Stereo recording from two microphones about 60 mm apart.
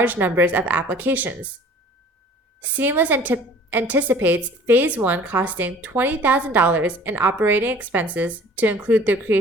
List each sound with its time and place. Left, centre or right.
0.0 s speech: right
2.6 s a woman's voice: right